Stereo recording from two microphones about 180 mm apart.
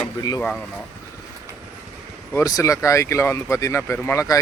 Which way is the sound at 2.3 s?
20° left (ahead or behind).